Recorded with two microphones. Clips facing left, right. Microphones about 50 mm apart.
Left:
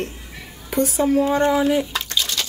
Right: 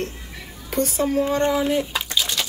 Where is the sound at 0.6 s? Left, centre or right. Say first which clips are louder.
Left 3 dB; centre.